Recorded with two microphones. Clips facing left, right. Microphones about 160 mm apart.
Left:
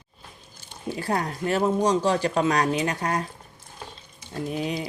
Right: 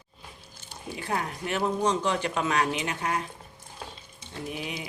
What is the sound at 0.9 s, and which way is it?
Speech, 40° left (ahead or behind).